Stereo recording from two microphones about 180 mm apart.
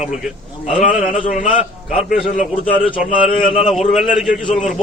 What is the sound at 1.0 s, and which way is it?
A man's voice, 45° left (ahead or behind).